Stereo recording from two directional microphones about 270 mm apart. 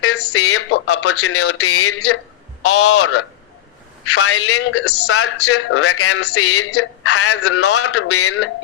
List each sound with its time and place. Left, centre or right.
0.0 s a man's voice: left